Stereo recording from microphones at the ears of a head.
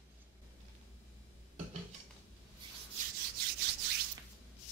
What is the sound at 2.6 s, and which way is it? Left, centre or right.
Rub, right.